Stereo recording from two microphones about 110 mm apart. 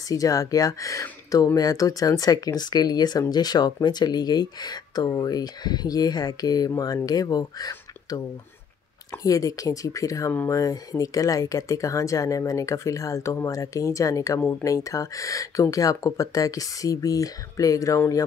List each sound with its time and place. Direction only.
0.1 s speech: 30° left (ahead or behind)
10.3 s speech: 20° left (ahead or behind)
10.6 s speech: 30° left (ahead or behind)